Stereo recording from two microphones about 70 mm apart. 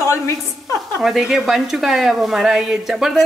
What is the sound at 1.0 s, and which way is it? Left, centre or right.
A woman's voice, centre.